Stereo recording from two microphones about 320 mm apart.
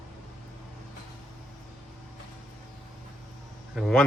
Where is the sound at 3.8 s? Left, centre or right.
Centre.